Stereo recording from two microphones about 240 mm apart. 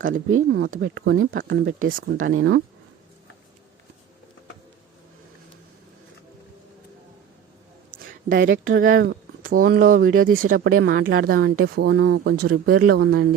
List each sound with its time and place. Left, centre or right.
0.0 s speech: right
2.3 s speech: right
7.9 s a sound: right
8.7 s speech: right